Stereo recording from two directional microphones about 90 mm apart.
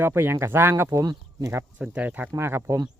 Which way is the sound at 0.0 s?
25° right (ahead or behind).